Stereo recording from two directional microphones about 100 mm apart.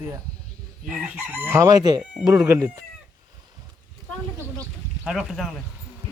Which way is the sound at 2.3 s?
30° right (ahead or behind).